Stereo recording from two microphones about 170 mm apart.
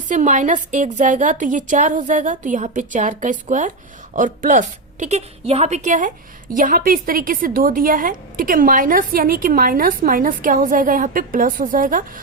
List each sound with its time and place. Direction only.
0.1 s a woman's voice: 50° right (ahead or behind)